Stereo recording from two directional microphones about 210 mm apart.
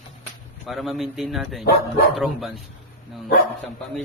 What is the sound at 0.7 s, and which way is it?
A man's voice, centre (ahead or behind).